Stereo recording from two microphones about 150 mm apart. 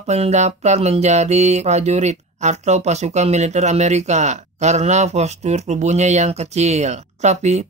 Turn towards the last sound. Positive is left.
turn(degrees=-50)  # may be behind; listen again after turning